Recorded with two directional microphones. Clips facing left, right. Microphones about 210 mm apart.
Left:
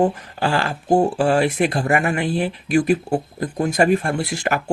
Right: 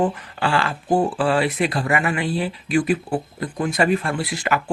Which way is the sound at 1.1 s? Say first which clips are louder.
Left 2 dB; 45° left (ahead or behind).